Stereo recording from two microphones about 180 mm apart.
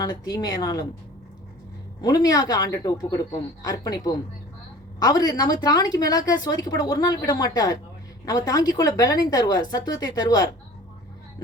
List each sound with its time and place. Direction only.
0.0 s a woman's voice: 20° left (ahead or behind)
2.0 s a woman's voice: 20° left (ahead or behind)